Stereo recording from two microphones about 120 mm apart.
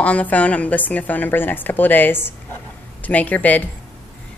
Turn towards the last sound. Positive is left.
turn(degrees=10)  # may be behind; listen again after turning